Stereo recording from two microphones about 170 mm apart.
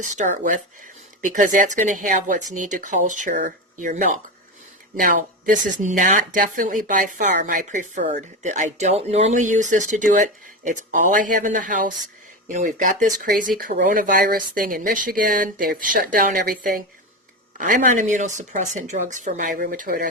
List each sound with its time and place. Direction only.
0.0 s speech: 50° right (ahead or behind)